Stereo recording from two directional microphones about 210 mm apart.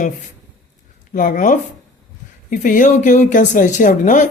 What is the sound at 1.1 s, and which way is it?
Speech, 40° left (ahead or behind).